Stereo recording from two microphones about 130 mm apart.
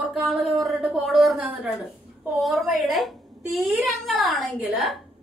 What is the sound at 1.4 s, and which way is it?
Speech, 10° right (ahead or behind).